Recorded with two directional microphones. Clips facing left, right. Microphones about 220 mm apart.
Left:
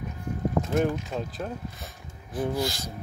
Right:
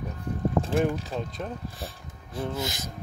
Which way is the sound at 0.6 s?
30° right (ahead or behind).